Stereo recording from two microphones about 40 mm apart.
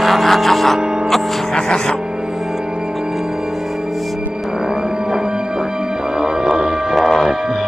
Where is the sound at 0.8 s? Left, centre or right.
Centre.